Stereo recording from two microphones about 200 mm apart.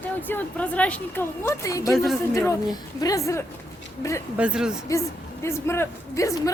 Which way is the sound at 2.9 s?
15° left (ahead or behind).